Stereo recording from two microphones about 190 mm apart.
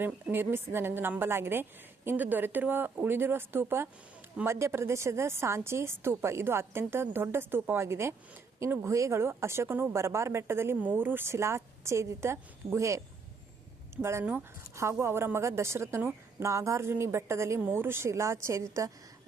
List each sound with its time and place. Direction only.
0.0 s speech: 10° right (ahead or behind)